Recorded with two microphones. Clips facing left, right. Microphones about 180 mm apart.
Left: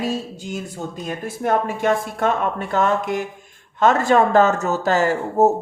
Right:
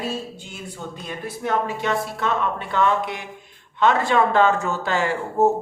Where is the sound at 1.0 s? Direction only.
45° left (ahead or behind).